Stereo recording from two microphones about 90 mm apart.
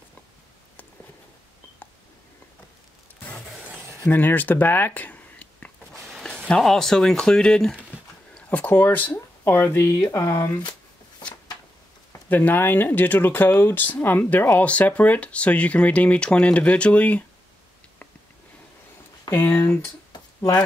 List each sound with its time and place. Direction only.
4.1 s speech: 20° left (ahead or behind)
12.3 s speech: 20° left (ahead or behind)
19.3 s speech: 30° left (ahead or behind)